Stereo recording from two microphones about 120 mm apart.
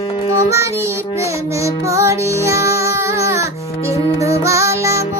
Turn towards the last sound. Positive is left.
turn(degrees=-25)  # may be behind; listen again after turning